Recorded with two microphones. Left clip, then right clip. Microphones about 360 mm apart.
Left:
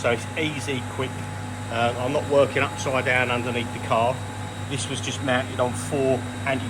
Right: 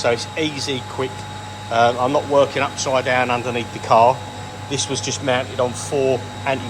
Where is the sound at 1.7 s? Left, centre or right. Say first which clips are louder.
Right 8 dB; centre.